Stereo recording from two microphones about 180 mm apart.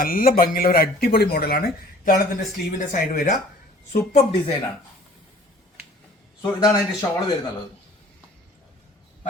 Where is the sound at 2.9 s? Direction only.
45° left (ahead or behind).